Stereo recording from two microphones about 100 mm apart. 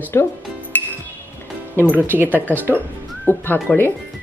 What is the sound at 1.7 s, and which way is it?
Speech, 15° left (ahead or behind).